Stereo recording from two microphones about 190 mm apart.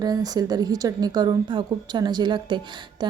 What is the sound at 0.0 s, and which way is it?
A woman's voice, 20° right (ahead or behind).